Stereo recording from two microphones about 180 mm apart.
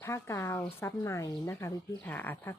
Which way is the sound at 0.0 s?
15° left (ahead or behind).